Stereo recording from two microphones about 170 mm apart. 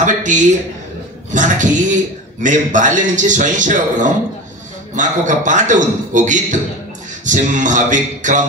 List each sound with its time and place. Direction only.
0.0 s a man's voice: 50° right (ahead or behind)